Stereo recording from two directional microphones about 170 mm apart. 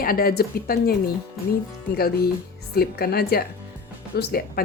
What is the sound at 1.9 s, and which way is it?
Speech, 65° left (ahead or behind).